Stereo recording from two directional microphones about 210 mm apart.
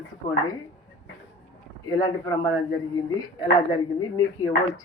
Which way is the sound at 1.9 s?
20° left (ahead or behind).